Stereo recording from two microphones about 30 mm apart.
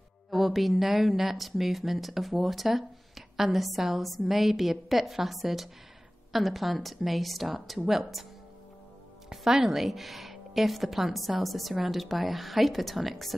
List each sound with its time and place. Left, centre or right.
0.3 s speech: centre
9.5 s a woman's voice: centre
9.8 s speech: centre